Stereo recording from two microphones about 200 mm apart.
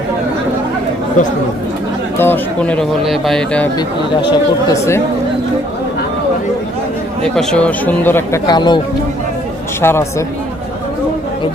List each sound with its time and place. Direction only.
2.1 s speech: 10° left (ahead or behind)
4.3 s speech: 15° left (ahead or behind)
7.2 s speech: 5° left (ahead or behind); by 8.8 s 20° left (ahead or behind)
9.8 s speech: 15° left (ahead or behind)